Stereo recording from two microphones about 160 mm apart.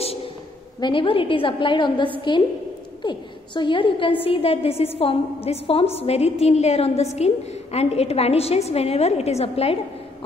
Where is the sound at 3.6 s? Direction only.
30° left (ahead or behind).